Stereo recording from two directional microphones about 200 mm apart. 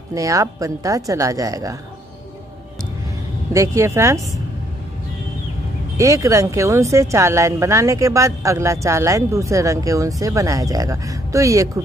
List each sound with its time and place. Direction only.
0.1 s speech: 15° right (ahead or behind)
3.5 s speech: 15° right (ahead or behind)
5.9 s speech: 15° right (ahead or behind)